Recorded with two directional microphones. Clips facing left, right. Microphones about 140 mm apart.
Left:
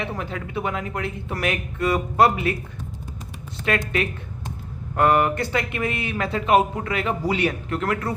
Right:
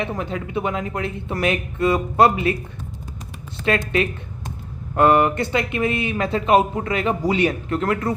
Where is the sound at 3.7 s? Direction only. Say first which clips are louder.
Right 3 dB; 25° right (ahead or behind).